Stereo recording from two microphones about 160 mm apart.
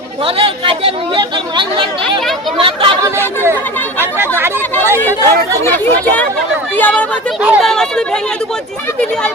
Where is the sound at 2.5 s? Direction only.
35° right (ahead or behind).